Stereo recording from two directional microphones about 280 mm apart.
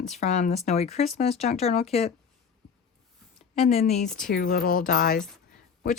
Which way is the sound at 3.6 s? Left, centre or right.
Left.